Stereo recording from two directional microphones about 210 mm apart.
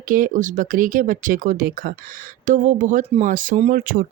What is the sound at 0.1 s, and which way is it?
Speech, 40° right (ahead or behind).